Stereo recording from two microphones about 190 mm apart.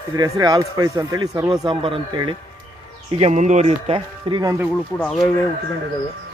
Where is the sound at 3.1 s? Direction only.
35° right (ahead or behind); by 4.7 s 20° right (ahead or behind).